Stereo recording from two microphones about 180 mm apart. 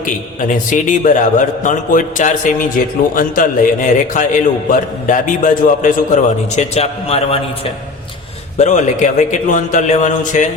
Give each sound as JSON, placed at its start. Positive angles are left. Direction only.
{"t": 0.0, "sound": "a man's voice", "side_deg": 45}
{"t": 8.5, "sound": "a man's voice", "side_deg": 40}